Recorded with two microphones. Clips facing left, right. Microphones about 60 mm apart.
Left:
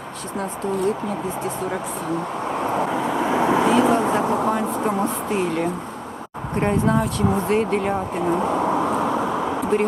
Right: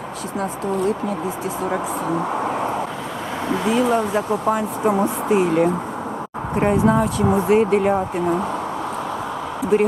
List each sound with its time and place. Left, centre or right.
0.3 s speech: centre
2.5 s vehicle: centre
3.2 s vehicle: centre
3.7 s speech: centre
9.7 s speech: centre